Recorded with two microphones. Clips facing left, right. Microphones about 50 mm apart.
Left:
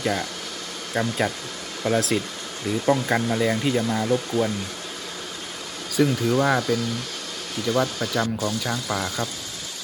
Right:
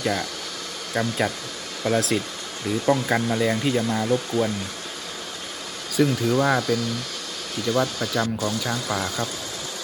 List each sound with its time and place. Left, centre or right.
0.0 s speech: centre
5.9 s speech: centre